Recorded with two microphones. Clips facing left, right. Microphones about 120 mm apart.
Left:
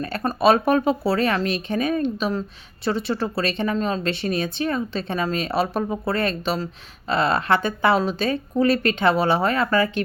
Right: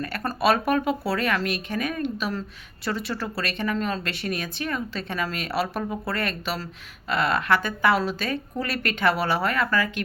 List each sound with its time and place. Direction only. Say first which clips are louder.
0.0 s speech: left 5 dB; 25° left (ahead or behind)